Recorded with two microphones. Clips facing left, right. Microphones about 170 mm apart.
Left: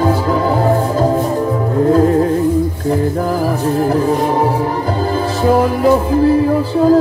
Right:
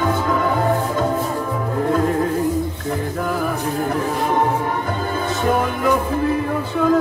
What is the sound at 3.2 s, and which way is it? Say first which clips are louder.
Music: left 6 dB; 30° left (ahead or behind).